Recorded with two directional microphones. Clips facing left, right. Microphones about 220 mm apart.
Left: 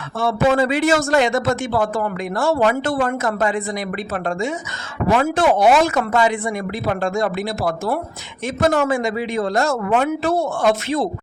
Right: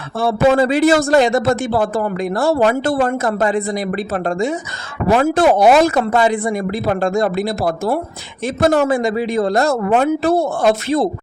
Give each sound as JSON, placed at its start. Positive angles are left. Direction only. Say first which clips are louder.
{"t": 0.2, "sound": "a man's voice", "louder": "right 3 dB", "side_deg": -35}